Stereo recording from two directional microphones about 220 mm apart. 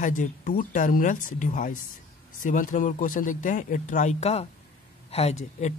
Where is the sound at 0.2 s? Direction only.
35° left (ahead or behind).